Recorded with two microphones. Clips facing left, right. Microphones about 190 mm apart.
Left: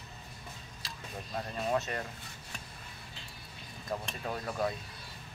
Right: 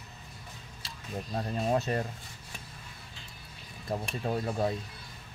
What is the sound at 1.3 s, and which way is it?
Speech, 30° right (ahead or behind).